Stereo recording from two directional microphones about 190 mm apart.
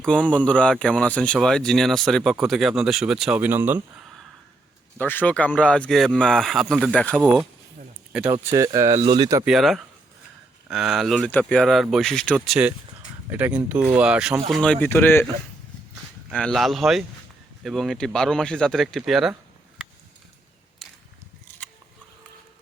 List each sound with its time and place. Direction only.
0.0 s speech: 5° left (ahead or behind); by 3.8 s 10° right (ahead or behind)
4.9 s speech: 10° left (ahead or behind)
8.1 s speech: 10° right (ahead or behind)
9.4 s speech: centre (ahead or behind)
13.3 s speech: 10° right (ahead or behind); by 15.3 s 10° left (ahead or behind)
16.3 s speech: 5° left (ahead or behind)